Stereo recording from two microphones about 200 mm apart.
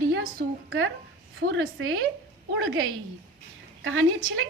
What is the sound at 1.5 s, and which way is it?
Speech, 75° right (ahead or behind).